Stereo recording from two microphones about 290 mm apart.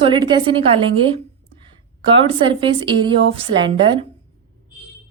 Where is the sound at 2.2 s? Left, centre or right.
Centre.